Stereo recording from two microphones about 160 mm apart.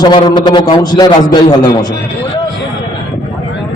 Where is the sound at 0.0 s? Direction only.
25° left (ahead or behind).